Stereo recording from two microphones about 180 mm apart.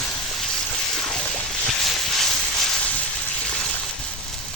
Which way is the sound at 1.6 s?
Centre (ahead or behind).